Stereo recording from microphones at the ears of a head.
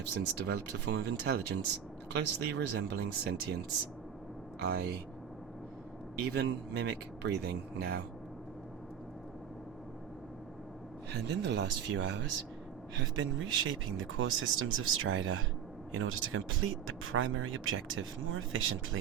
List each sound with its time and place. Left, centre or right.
0.0 s speech: right
6.1 s speech: right
11.1 s speech: right